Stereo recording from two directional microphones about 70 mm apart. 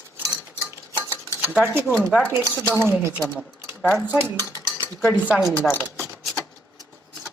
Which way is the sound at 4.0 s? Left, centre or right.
Right.